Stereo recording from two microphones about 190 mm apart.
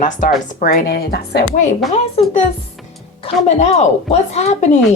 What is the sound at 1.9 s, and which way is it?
Speech, 35° left (ahead or behind).